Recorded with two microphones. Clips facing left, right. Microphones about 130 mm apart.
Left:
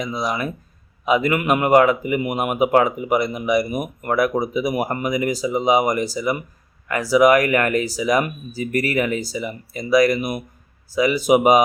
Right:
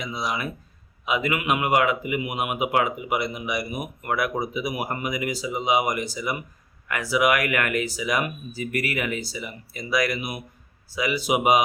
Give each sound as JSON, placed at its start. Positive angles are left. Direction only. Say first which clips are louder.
{"t": 0.0, "sound": "speech", "louder": "left 5 dB", "side_deg": 45}